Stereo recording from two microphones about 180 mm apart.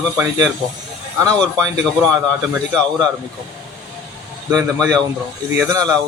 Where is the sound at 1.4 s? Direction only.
5° left (ahead or behind).